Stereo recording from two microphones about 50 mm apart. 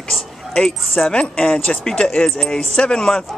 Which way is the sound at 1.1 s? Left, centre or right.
Left.